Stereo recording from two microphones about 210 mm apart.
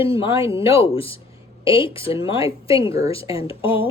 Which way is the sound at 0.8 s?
25° left (ahead or behind).